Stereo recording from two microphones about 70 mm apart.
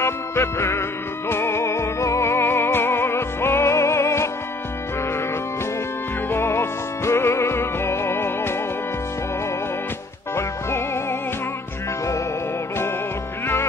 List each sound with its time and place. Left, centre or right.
0.0 s music: left
6.2 s music: left
10.3 s music: left